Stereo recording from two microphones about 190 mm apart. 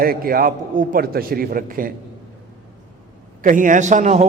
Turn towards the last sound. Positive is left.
turn(degrees=-40)  # may be behind; listen again after turning